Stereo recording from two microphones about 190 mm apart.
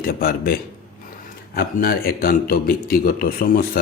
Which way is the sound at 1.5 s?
50° left (ahead or behind).